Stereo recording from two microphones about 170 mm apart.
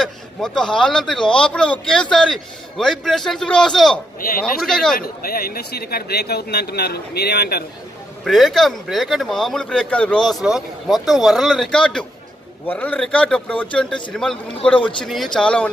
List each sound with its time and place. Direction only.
0.0 s a man's voice: 5° left (ahead or behind)
4.9 s speech: 60° left (ahead or behind)
8.2 s a man's voice: centre (ahead or behind)